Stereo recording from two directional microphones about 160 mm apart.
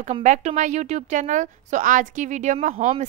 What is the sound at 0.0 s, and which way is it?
A woman's voice, 50° right (ahead or behind).